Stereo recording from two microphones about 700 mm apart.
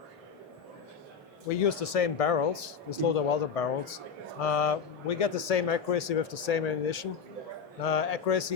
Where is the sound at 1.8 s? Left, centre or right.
Left.